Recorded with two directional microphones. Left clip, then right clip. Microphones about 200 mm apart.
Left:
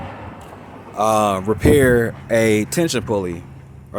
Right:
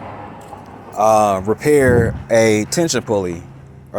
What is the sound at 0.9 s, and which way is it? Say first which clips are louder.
Speech: right 4 dB; 15° left (ahead or behind).